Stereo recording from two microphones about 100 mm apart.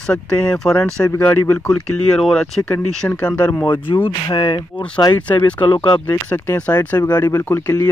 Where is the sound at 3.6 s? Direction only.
55° left (ahead or behind).